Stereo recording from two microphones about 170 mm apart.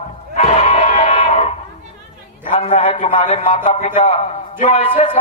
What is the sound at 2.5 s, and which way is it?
A man's voice, 40° left (ahead or behind).